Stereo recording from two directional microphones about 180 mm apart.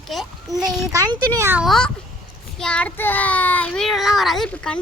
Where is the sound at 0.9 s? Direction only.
20° right (ahead or behind).